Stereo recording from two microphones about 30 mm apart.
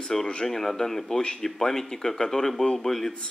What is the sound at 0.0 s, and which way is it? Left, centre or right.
A man's voice, centre.